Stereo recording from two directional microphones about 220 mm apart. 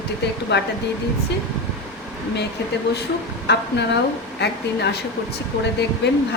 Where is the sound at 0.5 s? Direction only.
50° left (ahead or behind).